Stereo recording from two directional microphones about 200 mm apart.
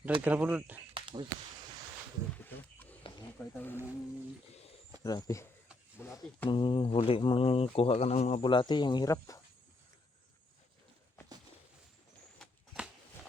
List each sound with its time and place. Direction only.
0.3 s speech: 5° right (ahead or behind)
0.9 s a sound: 25° right (ahead or behind)
2.3 s wild animals: 10° left (ahead or behind)
3.3 s speech: 10° left (ahead or behind)
5.0 s speech: 15° left (ahead or behind)
6.5 s speech: 25° left (ahead or behind)
12.4 s a sound: 5° right (ahead or behind)